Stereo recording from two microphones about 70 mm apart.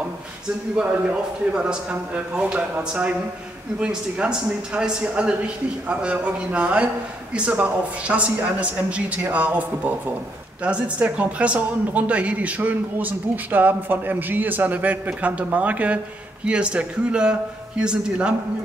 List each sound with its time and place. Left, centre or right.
1.5 s a man's voice: centre